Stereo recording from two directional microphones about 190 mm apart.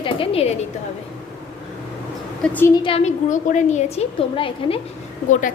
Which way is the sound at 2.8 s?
35° left (ahead or behind).